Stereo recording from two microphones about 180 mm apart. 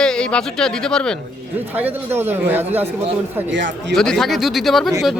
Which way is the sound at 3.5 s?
90° right.